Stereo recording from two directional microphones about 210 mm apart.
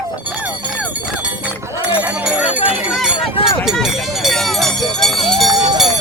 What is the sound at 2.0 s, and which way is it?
Run, 5° right (ahead or behind).